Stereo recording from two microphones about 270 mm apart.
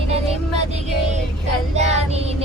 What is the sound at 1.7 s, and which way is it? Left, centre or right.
Child singing, right.